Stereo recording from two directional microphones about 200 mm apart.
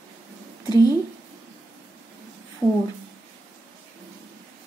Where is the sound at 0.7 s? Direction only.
20° left (ahead or behind).